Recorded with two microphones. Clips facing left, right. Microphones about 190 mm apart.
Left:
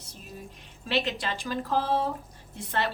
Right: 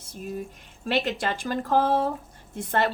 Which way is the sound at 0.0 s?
50° right (ahead or behind).